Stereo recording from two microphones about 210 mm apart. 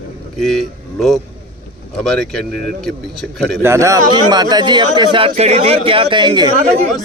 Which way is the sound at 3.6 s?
15° right (ahead or behind).